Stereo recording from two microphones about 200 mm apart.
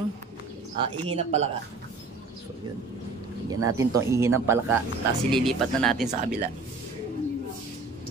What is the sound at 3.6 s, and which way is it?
Speech, 15° right (ahead or behind).